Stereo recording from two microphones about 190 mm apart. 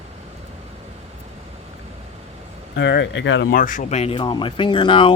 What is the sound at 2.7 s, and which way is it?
Speech, 65° left (ahead or behind).